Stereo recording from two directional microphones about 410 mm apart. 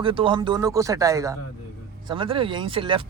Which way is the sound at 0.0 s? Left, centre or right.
Centre.